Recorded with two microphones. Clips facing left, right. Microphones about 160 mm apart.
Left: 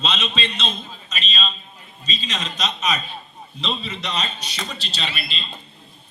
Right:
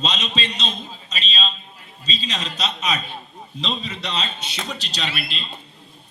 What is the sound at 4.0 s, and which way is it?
A man's voice, 30° right (ahead or behind).